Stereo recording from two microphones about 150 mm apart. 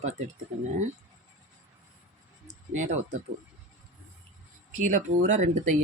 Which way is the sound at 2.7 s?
55° right (ahead or behind).